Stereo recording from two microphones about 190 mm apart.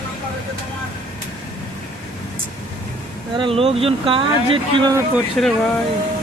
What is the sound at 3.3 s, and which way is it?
Speech, 25° right (ahead or behind).